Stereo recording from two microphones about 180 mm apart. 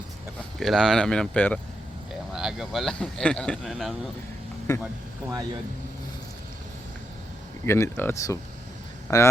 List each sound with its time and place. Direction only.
0.6 s speech: centre (ahead or behind)
4.7 s speech: 20° left (ahead or behind)
7.6 s speech: 15° left (ahead or behind)